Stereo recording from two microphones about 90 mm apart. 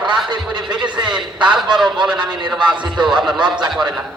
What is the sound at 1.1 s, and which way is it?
A man's voice, 5° right (ahead or behind).